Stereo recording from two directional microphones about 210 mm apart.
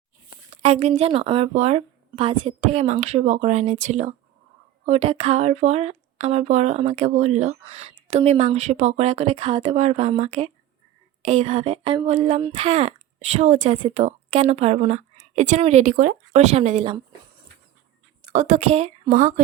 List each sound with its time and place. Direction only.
0.5 s speech: 30° right (ahead or behind)
18.3 s speech: 35° right (ahead or behind)